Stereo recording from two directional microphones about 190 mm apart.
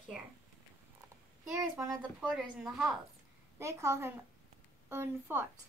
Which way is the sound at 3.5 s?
15° right (ahead or behind).